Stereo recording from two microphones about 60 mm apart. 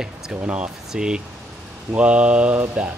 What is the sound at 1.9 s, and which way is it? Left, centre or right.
Mantra, centre.